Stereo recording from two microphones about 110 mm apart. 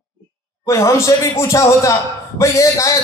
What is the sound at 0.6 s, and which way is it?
Speech, 30° left (ahead or behind).